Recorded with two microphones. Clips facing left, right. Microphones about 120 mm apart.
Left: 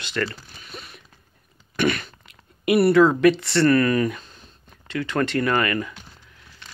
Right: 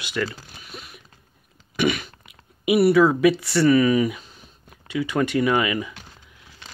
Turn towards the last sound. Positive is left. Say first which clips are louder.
# right 1 dB
turn(degrees=-10)  # may be behind; listen again after turning